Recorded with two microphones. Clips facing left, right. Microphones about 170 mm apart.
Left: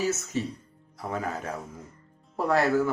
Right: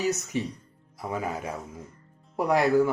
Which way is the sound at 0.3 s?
15° right (ahead or behind).